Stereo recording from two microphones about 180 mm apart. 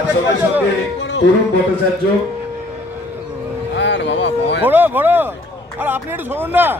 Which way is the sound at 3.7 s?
80° left.